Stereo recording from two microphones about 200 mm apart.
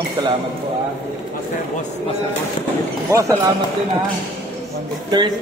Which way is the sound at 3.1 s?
15° right (ahead or behind).